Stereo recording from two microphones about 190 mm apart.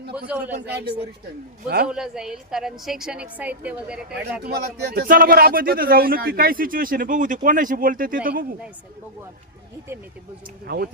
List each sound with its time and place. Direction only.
0.3 s a man's voice: 10° right (ahead or behind)
0.6 s speech: 60° right (ahead or behind)
1.9 s a woman's voice: 5° right (ahead or behind)
4.4 s speech: 55° right (ahead or behind)